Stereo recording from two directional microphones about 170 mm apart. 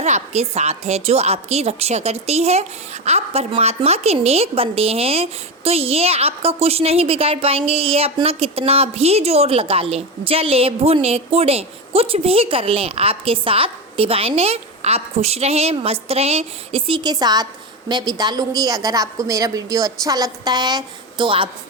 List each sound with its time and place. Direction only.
0.0 s a woman's voice: 40° right (ahead or behind)